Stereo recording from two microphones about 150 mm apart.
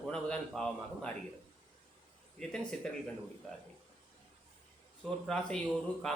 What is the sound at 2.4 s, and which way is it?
Speech, 5° left (ahead or behind).